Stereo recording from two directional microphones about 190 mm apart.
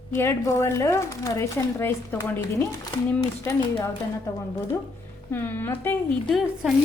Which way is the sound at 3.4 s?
20° left (ahead or behind).